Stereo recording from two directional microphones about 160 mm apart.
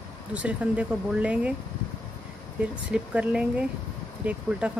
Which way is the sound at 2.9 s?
5° right (ahead or behind).